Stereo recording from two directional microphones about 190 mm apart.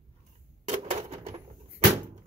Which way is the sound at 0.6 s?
35° right (ahead or behind).